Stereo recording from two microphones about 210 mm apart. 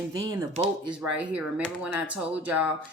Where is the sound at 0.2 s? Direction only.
15° right (ahead or behind).